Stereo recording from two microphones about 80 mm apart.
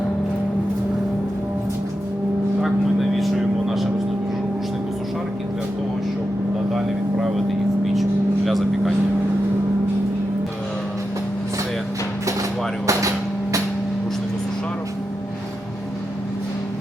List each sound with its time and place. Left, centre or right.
2.6 s vehicle: centre
6.7 s vehicle: centre
8.4 s vehicle: centre
12.9 s vehicle: right